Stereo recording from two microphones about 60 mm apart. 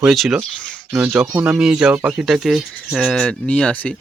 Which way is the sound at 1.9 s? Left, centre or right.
Right.